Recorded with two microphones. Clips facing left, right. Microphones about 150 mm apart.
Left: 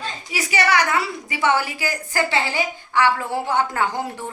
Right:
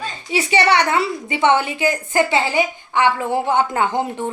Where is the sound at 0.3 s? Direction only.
30° right (ahead or behind).